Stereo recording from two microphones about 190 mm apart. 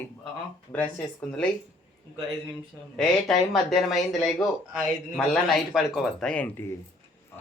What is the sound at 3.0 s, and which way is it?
Speech, centre (ahead or behind).